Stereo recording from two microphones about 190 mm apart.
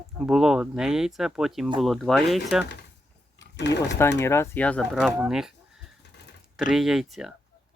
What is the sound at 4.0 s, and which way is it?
Speech, 15° left (ahead or behind).